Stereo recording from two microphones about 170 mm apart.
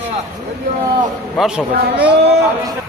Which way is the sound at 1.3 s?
Centre (ahead or behind).